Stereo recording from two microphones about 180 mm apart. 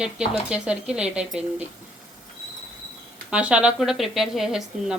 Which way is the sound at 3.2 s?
5° right (ahead or behind).